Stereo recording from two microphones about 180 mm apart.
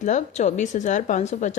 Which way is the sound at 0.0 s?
40° left (ahead or behind).